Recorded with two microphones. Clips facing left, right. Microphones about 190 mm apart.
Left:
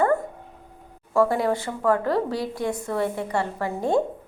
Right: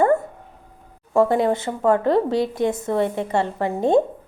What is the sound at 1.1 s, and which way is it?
A woman's voice, 20° right (ahead or behind).